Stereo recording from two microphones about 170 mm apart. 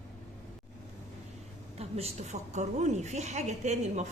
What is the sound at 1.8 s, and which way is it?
A woman's voice, 35° right (ahead or behind).